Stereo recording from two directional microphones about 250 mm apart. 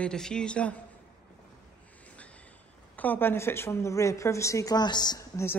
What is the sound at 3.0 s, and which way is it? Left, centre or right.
A woman's voice, centre.